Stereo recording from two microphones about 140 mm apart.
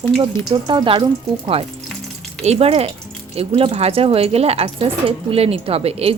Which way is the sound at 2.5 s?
45° right (ahead or behind).